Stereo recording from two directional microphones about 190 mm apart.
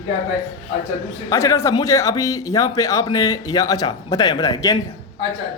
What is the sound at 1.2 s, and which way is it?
Speech, 15° left (ahead or behind).